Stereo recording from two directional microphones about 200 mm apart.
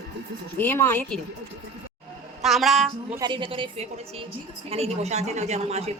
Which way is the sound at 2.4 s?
Centre (ahead or behind).